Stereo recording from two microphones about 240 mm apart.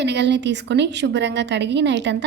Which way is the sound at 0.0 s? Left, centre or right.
Right.